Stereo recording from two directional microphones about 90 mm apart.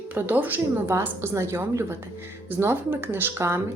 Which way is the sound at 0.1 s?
20° right (ahead or behind).